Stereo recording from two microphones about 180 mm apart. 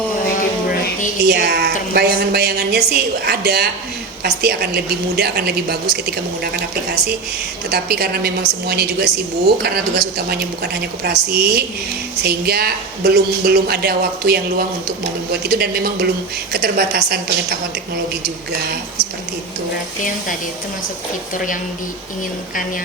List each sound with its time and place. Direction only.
0.7 s a sound: 45° left (ahead or behind)
1.2 s a woman's voice: 65° right (ahead or behind)
21.3 s a woman's voice: 50° left (ahead or behind)